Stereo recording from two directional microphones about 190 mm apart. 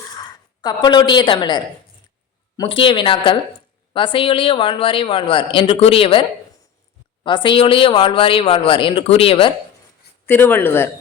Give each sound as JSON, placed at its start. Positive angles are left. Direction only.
{"t": 0.6, "sound": "speech", "side_deg": 20}
{"t": 7.3, "sound": "speech", "side_deg": 25}
{"t": 10.2, "sound": "speech", "side_deg": 10}